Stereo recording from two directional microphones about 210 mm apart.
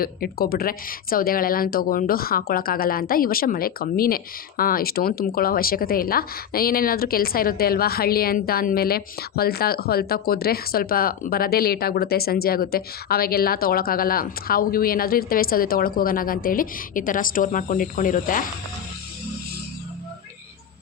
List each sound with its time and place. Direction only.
0.0 s a woman's voice: 45° left (ahead or behind)